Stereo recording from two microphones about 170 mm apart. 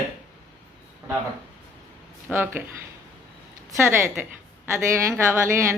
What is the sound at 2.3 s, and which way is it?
Speech, 10° right (ahead or behind).